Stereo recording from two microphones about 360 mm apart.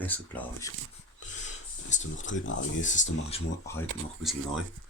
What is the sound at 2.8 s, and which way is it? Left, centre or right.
Speech, centre.